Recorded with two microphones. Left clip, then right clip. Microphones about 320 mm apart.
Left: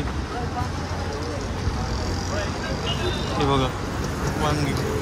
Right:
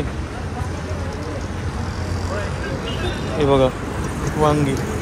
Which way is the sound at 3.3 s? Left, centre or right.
Centre.